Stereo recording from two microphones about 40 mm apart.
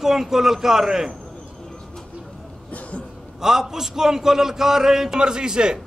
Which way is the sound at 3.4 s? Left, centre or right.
Centre.